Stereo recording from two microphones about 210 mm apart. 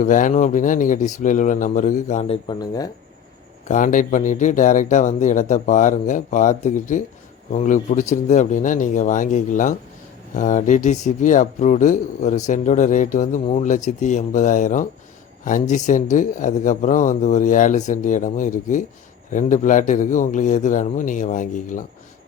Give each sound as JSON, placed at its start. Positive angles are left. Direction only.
{"t": 0.0, "sound": "speech", "side_deg": 40}
{"t": 3.7, "sound": "speech", "side_deg": 40}